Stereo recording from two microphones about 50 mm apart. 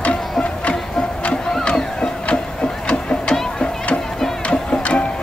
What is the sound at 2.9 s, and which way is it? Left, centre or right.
Music, left.